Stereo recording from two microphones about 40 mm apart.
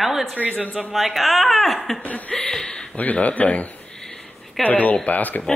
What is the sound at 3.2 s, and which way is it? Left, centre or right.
Speech, left.